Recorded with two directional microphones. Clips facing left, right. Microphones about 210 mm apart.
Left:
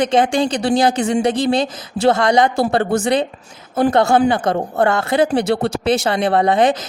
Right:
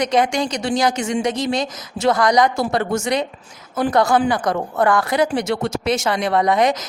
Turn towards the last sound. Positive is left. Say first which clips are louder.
# left 2 dB
turn(degrees=30)  # may be behind; listen again after turning